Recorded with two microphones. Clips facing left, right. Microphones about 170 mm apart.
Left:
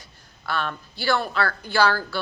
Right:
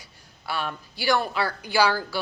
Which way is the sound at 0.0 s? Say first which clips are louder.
Left 2 dB; 10° right (ahead or behind).